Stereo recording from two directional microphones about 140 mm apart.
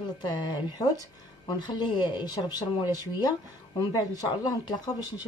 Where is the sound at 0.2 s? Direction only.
30° left (ahead or behind).